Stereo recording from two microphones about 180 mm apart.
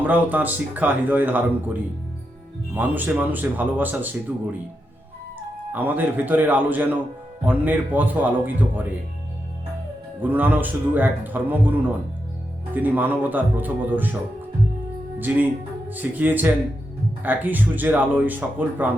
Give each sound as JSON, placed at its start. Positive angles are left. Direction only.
{"t": 0.0, "sound": "a man's voice", "side_deg": -10}
{"t": 2.7, "sound": "a man's voice", "side_deg": -10}
{"t": 5.7, "sound": "a man's voice", "side_deg": -10}
{"t": 10.2, "sound": "a man's voice", "side_deg": -10}
{"t": 15.2, "sound": "a man's voice", "side_deg": -10}